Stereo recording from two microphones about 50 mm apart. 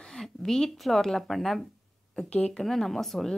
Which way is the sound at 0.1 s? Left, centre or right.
Centre.